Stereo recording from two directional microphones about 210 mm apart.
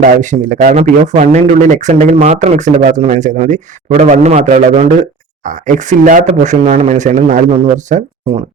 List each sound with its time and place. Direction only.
0.0 s speech: 40° right (ahead or behind)